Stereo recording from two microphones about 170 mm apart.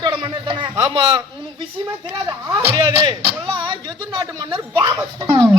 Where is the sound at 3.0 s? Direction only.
30° right (ahead or behind).